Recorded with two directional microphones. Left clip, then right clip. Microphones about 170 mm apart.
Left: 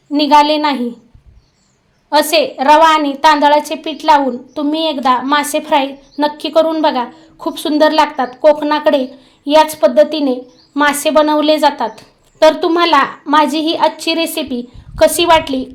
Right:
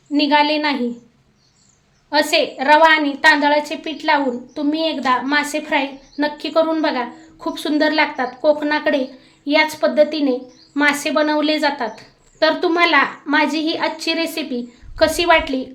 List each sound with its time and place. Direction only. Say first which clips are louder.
0.1 s a woman's voice: left 6 dB; 30° left (ahead or behind)
2.0 s a woman's voice: left 5 dB; 30° left (ahead or behind)